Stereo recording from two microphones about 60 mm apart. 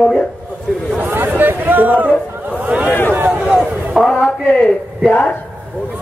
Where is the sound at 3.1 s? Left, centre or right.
Right.